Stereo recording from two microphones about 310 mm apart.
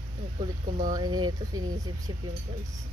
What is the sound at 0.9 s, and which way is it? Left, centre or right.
Speech, centre.